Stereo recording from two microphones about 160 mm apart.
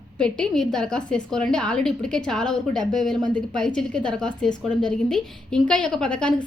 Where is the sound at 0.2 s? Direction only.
5° left (ahead or behind).